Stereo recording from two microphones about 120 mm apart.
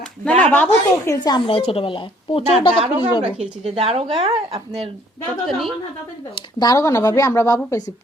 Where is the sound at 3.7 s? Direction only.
60° right (ahead or behind).